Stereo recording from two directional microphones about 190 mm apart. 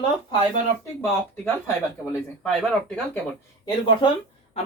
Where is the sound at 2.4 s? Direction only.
5° left (ahead or behind).